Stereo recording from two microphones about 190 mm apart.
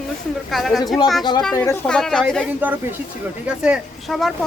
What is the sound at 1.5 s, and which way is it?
Speech, 15° left (ahead or behind).